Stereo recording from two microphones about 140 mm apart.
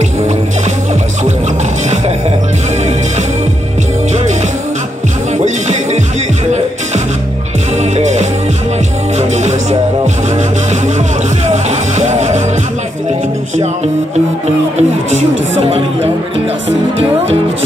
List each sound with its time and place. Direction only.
7.9 s music: 55° right (ahead or behind)
11.4 s music: 55° right (ahead or behind)
14.8 s music: 55° right (ahead or behind)